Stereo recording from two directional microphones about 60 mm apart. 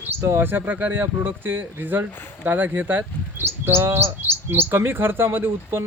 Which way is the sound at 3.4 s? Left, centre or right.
Right.